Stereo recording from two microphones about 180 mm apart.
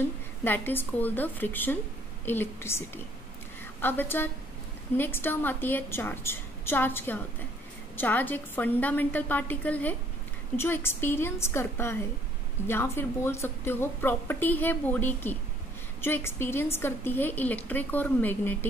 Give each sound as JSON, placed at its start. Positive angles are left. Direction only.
{"t": 0.4, "sound": "a woman's voice", "side_deg": 10}
{"t": 3.8, "sound": "a woman's voice", "side_deg": 10}